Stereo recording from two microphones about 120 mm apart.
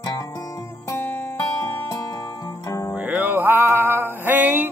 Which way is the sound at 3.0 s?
15° right (ahead or behind).